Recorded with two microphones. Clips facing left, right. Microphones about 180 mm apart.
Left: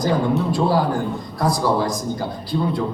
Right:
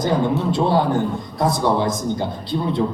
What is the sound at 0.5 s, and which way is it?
A man's voice, 25° right (ahead or behind).